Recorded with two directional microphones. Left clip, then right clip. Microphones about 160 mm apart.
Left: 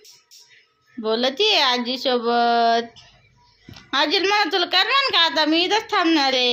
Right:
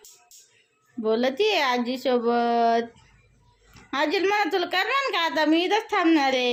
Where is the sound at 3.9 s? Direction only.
10° right (ahead or behind).